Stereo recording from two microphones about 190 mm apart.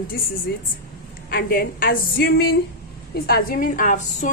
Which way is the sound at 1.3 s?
50° left (ahead or behind).